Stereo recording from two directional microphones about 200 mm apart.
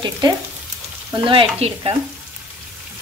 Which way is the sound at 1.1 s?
25° right (ahead or behind).